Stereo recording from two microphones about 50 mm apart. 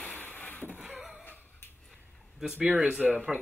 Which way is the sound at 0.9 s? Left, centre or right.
Centre.